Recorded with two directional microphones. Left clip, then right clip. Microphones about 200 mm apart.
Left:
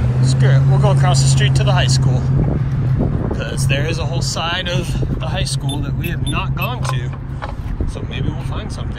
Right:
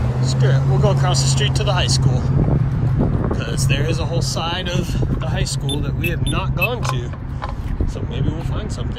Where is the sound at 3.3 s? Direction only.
15° right (ahead or behind).